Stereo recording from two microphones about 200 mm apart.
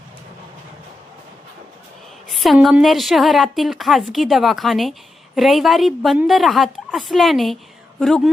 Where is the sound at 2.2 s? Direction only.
Centre (ahead or behind).